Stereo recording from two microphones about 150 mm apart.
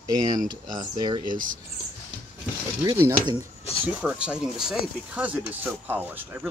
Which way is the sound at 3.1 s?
30° right (ahead or behind).